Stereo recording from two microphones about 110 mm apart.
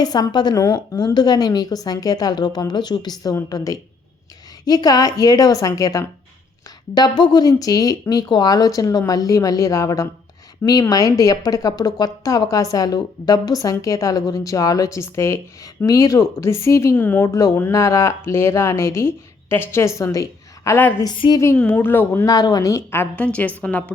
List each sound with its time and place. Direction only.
0.0 s a woman's voice: 35° left (ahead or behind)
16.9 s a woman's voice: 15° left (ahead or behind)
17.2 s a woman's voice: 30° left (ahead or behind)
22.3 s a woman's voice: 35° left (ahead or behind); by 23.9 s 10° left (ahead or behind)